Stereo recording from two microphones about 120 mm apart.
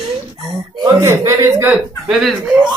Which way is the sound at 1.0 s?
25° right (ahead or behind).